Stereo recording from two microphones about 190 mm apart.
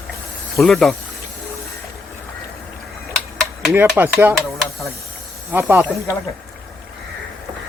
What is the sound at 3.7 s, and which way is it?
Speech, 10° right (ahead or behind).